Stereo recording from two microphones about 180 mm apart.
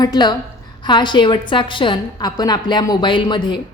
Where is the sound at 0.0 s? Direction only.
25° left (ahead or behind).